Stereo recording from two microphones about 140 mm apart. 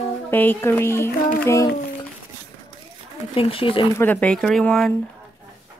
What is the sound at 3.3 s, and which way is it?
Speech, 40° left (ahead or behind).